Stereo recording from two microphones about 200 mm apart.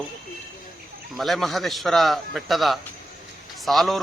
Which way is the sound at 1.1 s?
Centre (ahead or behind).